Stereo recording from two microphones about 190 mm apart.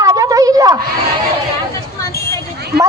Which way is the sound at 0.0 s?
15° right (ahead or behind).